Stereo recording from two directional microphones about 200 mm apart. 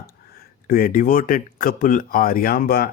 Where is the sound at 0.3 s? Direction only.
45° left (ahead or behind).